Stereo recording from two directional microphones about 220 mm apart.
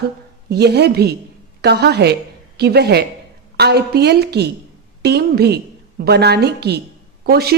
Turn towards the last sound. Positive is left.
turn(degrees=-45)  # may be behind; listen again after turning